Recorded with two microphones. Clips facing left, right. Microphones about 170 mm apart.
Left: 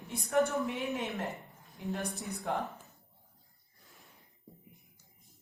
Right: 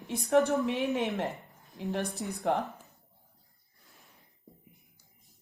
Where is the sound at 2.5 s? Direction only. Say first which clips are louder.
Right 5 dB; 75° right (ahead or behind).